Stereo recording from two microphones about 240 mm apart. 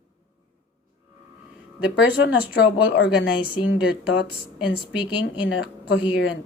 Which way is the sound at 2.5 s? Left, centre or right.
Left.